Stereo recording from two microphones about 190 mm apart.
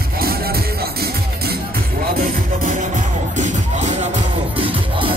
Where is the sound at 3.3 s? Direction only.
40° right (ahead or behind).